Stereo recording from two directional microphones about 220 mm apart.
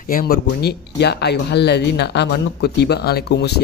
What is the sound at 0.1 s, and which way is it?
A man's voice, 45° left (ahead or behind).